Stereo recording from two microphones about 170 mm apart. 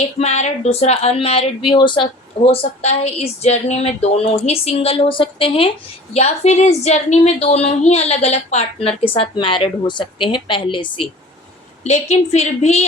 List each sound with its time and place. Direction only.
0.2 s a woman's voice: 40° left (ahead or behind)
2.5 s a woman's voice: 40° left (ahead or behind)
11.8 s a woman's voice: 40° left (ahead or behind)